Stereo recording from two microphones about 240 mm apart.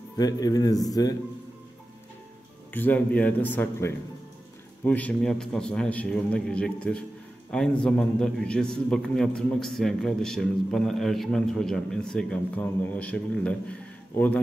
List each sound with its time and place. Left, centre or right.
0.2 s a man's voice: centre
2.7 s a man's voice: centre